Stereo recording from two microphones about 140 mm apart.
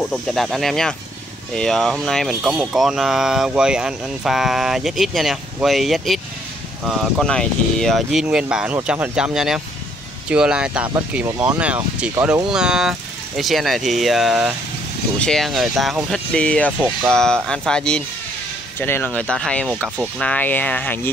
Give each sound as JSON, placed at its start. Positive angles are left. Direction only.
{"t": 0.0, "sound": "speech", "side_deg": 5}